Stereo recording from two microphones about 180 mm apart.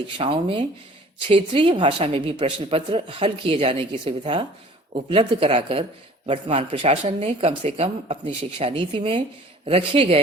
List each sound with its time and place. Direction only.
0.2 s a woman's voice: 30° right (ahead or behind)